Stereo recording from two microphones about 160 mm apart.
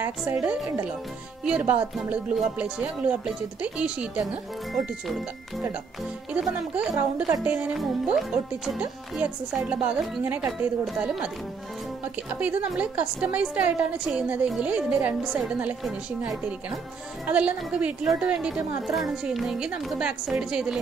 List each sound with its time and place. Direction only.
0.0 s a woman's voice: 15° right (ahead or behind)
0.4 s a woman's voice: centre (ahead or behind)
6.3 s a woman's voice: 10° right (ahead or behind)
7.0 s a woman's voice: 20° right (ahead or behind)
7.4 s a woman's voice: 5° right (ahead or behind)
12.4 s a woman's voice: 10° right (ahead or behind)